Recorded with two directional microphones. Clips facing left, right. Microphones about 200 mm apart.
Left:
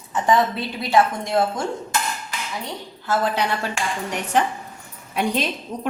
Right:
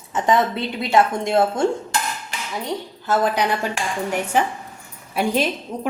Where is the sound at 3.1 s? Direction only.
15° right (ahead or behind).